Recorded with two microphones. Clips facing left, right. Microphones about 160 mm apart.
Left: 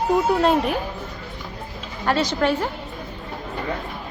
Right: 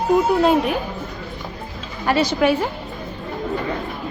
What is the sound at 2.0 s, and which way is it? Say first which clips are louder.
Speech: right 3 dB; 10° right (ahead or behind).